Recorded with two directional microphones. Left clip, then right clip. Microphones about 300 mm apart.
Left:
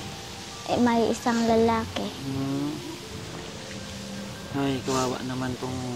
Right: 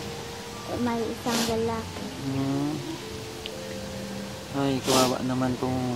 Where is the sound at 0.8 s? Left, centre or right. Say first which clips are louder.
Left 4 dB; left.